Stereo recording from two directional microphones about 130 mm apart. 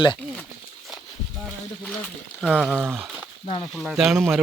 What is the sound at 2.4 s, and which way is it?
Speech, 5° right (ahead or behind).